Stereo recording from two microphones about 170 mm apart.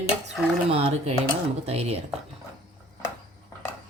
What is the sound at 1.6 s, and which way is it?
Speech, 40° right (ahead or behind).